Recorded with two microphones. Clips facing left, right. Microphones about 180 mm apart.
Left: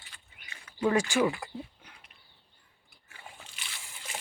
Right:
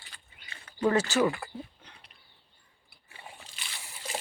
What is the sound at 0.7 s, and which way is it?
Speech, 10° left (ahead or behind).